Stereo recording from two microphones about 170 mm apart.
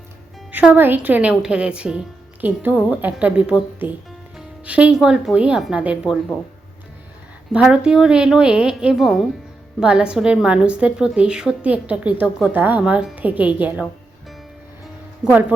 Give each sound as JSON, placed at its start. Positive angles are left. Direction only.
{"t": 0.5, "sound": "a woman's voice", "side_deg": -10}
{"t": 7.5, "sound": "a woman's voice", "side_deg": -5}
{"t": 15.2, "sound": "a woman's voice", "side_deg": -10}